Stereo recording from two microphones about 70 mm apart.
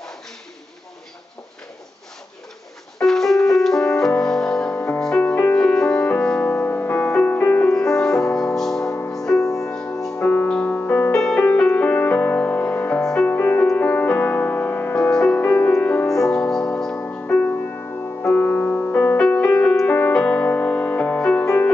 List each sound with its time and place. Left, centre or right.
3.0 s music: centre
4.6 s music: left
5.6 s music: centre
6.5 s music: left
7.6 s music: centre
10.1 s music: left
11.1 s music: centre
15.0 s music: centre
15.3 s music: left
16.1 s music: centre; by 19.2 s left
19.2 s music: centre
19.9 s music: left